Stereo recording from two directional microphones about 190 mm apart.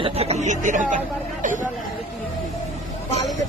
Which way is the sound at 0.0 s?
35° right (ahead or behind).